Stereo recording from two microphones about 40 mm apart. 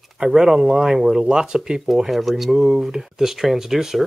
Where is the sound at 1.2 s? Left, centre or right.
Right.